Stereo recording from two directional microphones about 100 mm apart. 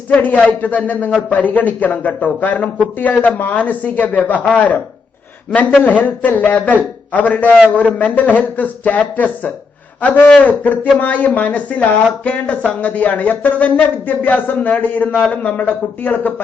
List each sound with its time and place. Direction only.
0.1 s a man's voice: 15° left (ahead or behind)
5.8 s a man's voice: 15° left (ahead or behind)